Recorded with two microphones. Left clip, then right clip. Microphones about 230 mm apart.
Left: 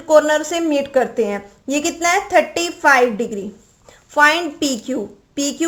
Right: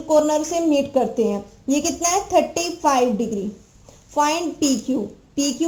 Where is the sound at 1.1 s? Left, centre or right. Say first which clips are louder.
Left 2 dB; left.